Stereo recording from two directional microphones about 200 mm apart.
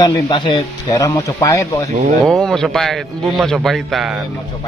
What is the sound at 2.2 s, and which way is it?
A man's voice, centre (ahead or behind).